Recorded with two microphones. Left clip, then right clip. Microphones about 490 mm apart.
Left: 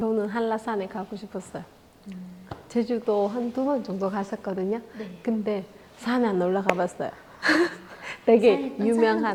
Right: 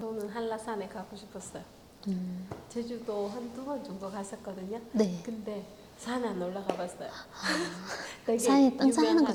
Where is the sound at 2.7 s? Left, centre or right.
Left.